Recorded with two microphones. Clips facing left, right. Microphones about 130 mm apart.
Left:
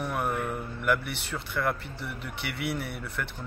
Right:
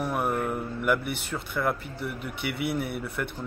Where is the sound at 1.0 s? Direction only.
50° right (ahead or behind).